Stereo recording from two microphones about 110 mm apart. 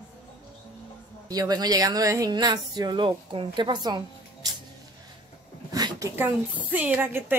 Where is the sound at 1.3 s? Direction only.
35° right (ahead or behind).